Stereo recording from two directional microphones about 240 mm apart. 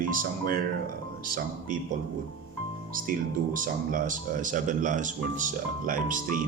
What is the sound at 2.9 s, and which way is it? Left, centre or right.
Speech, right.